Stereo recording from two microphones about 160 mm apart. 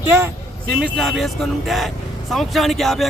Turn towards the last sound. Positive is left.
turn(degrees=0)  # may be behind; listen again after turning